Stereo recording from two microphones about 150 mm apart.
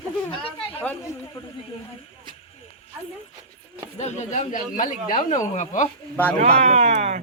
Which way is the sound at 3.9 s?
50° left (ahead or behind).